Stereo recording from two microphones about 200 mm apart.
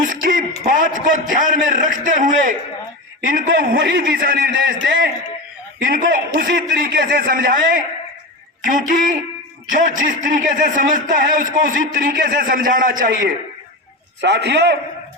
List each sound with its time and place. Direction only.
0.0 s a man's voice: 45° right (ahead or behind)
14.2 s a man's voice: 60° right (ahead or behind)